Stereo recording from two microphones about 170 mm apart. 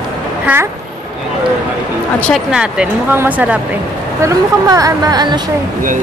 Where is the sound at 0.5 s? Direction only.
10° right (ahead or behind).